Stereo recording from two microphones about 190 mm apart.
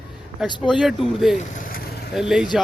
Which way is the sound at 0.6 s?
Centre (ahead or behind).